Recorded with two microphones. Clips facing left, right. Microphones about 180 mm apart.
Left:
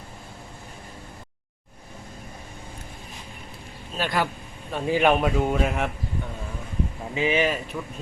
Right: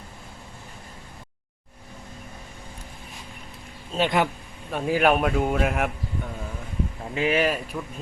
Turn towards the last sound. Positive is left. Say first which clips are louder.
# even
turn(degrees=-5)  # may be behind; listen again after turning